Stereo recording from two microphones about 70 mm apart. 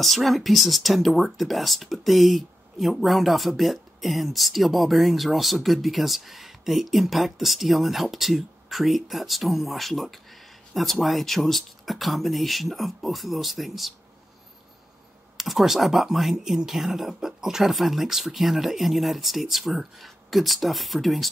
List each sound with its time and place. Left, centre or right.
0.0 s speech: centre
15.3 s speech: centre